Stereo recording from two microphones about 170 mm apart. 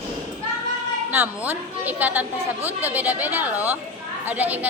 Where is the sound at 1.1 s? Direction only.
10° right (ahead or behind).